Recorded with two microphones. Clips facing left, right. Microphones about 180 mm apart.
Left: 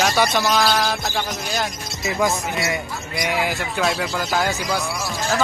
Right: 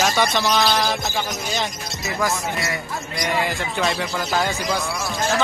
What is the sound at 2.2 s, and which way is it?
Speech, 20° left (ahead or behind).